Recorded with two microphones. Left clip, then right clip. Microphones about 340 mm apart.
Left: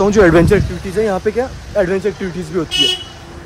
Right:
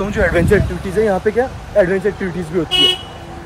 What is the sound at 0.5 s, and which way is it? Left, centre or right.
Speech, centre.